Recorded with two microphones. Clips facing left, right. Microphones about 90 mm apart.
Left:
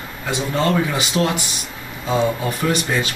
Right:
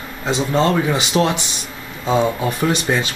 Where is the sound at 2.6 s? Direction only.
25° right (ahead or behind).